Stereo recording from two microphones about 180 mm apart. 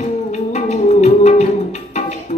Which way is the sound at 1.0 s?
35° left (ahead or behind).